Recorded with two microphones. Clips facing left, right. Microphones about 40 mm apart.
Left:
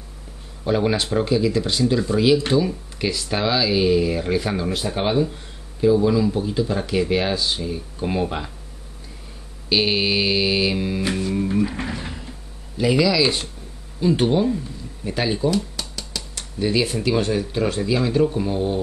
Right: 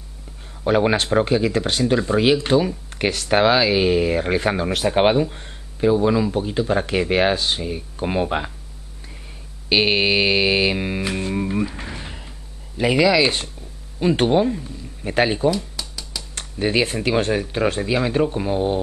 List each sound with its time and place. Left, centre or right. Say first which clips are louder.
0.7 s speech: right 3 dB; right
3.1 s speech: right 6 dB; right
5.2 s speech: even; right
7.6 s speech: right 1 dB; right
9.7 s speech: right 2 dB; right
11.1 s music: left 1 dB; right
12.7 s speech: right 2 dB; right